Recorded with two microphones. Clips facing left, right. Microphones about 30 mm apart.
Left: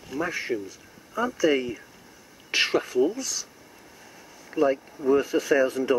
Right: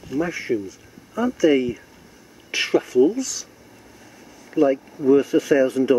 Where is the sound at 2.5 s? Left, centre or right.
Left.